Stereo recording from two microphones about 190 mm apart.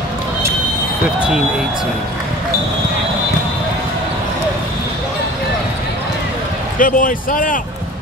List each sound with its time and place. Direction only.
6.8 s speech: 45° left (ahead or behind)